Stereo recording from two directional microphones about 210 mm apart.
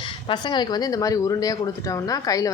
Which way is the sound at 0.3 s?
20° left (ahead or behind).